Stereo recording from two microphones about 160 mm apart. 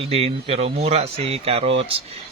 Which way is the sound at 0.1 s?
40° right (ahead or behind).